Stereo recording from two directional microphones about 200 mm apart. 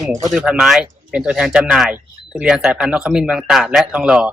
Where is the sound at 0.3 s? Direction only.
5° right (ahead or behind).